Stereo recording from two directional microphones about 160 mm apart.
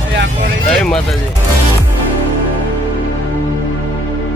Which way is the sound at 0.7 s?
5° left (ahead or behind).